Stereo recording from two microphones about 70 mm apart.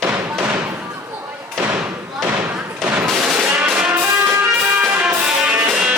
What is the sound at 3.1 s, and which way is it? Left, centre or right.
Music, centre.